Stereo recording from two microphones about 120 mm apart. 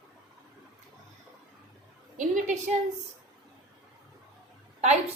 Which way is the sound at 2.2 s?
90° right.